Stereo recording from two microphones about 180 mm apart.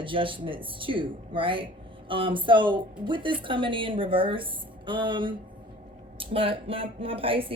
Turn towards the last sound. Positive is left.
turn(degrees=-30)  # may be behind; listen again after turning